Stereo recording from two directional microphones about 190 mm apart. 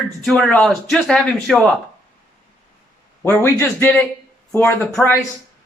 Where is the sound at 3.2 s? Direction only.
10° left (ahead or behind).